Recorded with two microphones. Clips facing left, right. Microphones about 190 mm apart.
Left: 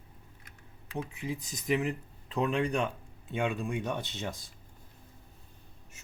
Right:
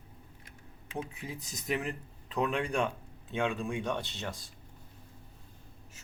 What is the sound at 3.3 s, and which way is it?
Speech, 10° left (ahead or behind).